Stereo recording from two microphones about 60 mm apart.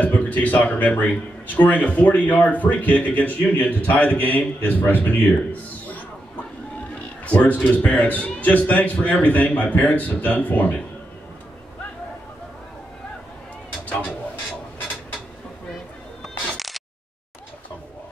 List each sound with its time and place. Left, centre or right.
0.0 s speech: left
7.0 s speech: left
16.5 s a sound: centre